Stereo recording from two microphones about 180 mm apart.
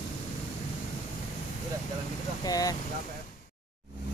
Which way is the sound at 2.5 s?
20° left (ahead or behind).